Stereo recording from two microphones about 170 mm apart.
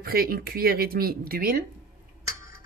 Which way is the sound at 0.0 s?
60° right (ahead or behind).